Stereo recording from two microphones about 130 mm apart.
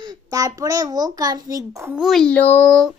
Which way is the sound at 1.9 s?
Centre (ahead or behind).